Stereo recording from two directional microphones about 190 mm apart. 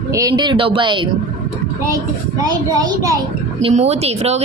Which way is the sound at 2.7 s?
15° right (ahead or behind).